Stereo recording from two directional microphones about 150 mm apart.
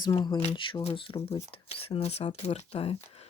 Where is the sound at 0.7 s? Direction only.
35° left (ahead or behind).